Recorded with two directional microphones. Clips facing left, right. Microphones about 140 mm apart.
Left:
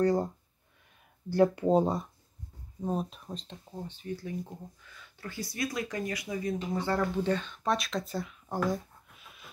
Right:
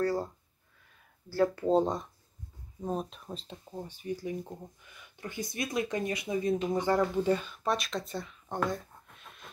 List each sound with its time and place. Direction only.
0.0 s speech: 20° left (ahead or behind)
1.3 s speech: 20° left (ahead or behind); by 9.5 s 5° left (ahead or behind)